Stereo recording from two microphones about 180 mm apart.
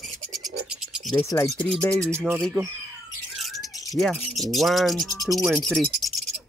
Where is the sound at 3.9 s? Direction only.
Centre (ahead or behind).